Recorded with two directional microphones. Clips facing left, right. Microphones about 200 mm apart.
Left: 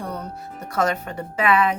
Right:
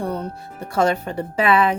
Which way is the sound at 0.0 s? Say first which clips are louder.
Right 5 dB; 30° right (ahead or behind).